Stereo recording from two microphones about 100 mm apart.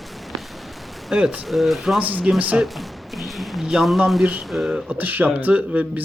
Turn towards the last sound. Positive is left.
turn(degrees=-15)  # may be behind; listen again after turning